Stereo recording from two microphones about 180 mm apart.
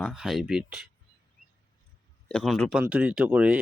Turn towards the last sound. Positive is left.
turn(degrees=-5)  # may be behind; listen again after turning